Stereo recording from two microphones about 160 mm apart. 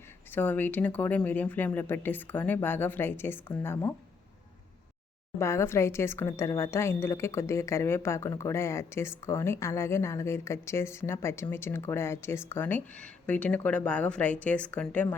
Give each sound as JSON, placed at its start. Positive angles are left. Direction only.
{"t": 0.3, "sound": "a woman's voice", "side_deg": 10}
{"t": 5.4, "sound": "a woman's voice", "side_deg": 15}